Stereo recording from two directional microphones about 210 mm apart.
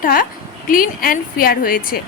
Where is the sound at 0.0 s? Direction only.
40° left (ahead or behind).